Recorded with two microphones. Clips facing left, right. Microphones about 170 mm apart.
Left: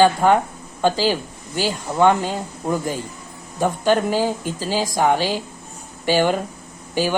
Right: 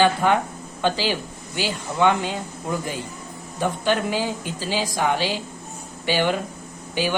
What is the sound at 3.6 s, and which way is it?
A man's voice, 45° left (ahead or behind).